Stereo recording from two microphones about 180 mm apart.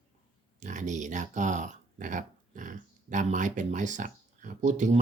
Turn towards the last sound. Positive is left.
turn(degrees=-40)  # may be behind; listen again after turning